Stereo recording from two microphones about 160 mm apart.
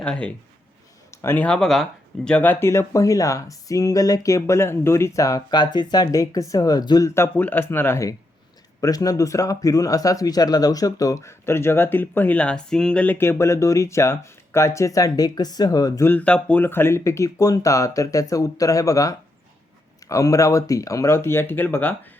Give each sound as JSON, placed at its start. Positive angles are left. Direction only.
{"t": 0.0, "sound": "speech", "side_deg": 5}